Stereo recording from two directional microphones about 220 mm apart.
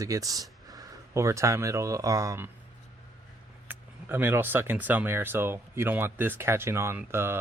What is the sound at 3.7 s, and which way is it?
Speech, 10° right (ahead or behind).